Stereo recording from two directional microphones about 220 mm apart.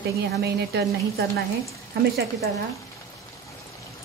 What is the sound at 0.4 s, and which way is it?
Speech, 45° right (ahead or behind).